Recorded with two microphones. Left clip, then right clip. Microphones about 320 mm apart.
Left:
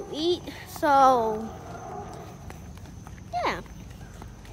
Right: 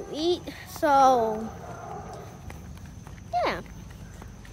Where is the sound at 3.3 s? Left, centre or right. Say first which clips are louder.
Right 2 dB; centre.